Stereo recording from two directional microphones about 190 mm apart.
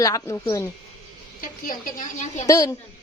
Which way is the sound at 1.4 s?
45° left (ahead or behind).